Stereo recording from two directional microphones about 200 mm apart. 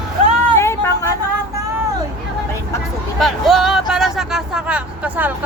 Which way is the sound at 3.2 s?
Centre (ahead or behind).